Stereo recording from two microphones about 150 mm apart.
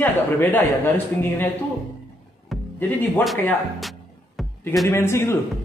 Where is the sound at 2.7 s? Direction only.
15° left (ahead or behind).